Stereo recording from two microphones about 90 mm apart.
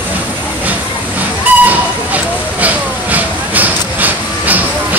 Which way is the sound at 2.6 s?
20° right (ahead or behind).